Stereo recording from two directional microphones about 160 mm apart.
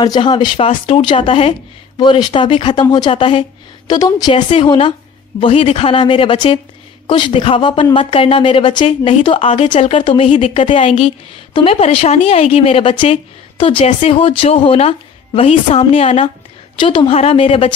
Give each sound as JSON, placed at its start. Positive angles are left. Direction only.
{"t": 0.0, "sound": "a woman's voice", "side_deg": 25}